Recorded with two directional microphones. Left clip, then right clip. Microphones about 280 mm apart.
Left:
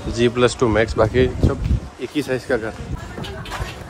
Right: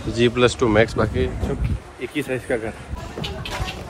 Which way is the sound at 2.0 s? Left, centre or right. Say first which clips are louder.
Left 2 dB; centre.